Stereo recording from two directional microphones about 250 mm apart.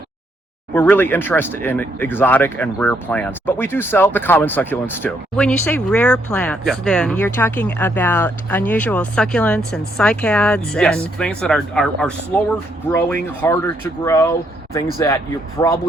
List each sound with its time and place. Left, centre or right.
0.7 s speech: centre